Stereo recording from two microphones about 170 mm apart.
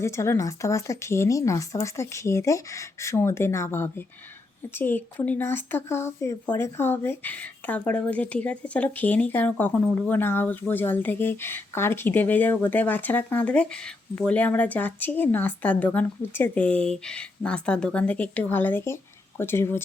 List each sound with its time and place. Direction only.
0.0 s speech: 15° left (ahead or behind)